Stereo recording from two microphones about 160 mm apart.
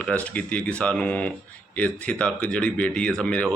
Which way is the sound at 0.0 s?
10° left (ahead or behind).